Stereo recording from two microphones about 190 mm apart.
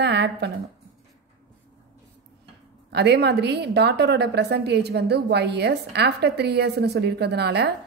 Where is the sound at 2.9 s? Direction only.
60° right (ahead or behind).